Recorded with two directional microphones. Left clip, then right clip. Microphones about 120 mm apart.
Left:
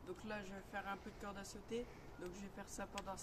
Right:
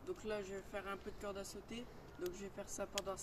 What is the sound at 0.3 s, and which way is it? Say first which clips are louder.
Speech: right 4 dB; 25° left (ahead or behind).